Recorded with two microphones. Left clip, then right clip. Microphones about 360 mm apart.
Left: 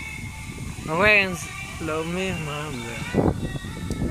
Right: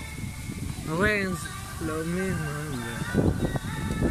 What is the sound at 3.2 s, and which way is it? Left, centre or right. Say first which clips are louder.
Music: left 5 dB; left.